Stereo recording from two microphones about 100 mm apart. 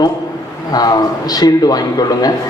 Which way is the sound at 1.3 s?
40° left (ahead or behind).